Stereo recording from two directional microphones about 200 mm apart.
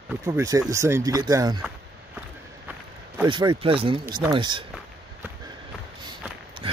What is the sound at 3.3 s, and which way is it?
Speech, 25° right (ahead or behind).